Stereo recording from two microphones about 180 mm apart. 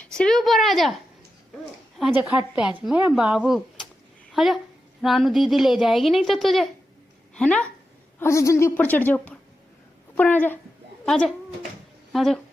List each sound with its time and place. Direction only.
0.0 s speech: 5° left (ahead or behind)
2.0 s a woman's voice: 10° right (ahead or behind)